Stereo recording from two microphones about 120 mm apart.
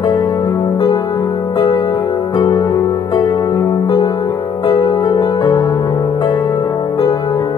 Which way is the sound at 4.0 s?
40° left (ahead or behind).